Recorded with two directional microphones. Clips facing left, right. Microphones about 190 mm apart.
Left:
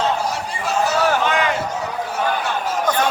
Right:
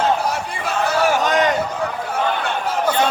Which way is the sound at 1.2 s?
40° right (ahead or behind).